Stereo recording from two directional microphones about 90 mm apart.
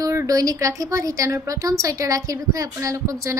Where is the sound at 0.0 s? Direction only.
35° right (ahead or behind).